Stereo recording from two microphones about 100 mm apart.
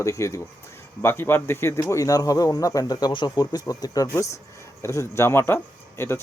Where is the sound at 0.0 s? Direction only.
30° left (ahead or behind).